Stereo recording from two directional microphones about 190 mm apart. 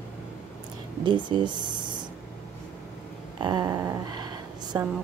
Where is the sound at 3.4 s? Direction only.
20° right (ahead or behind).